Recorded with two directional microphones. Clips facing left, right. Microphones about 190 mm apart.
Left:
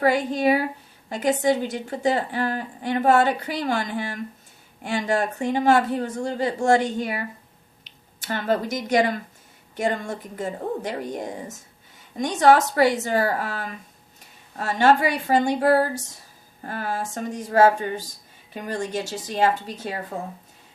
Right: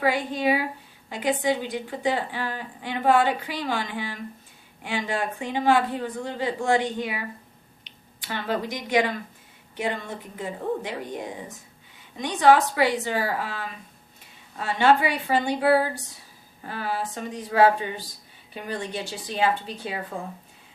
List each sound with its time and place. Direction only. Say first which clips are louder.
0.0 s a woman's voice: left 4 dB; 45° left (ahead or behind)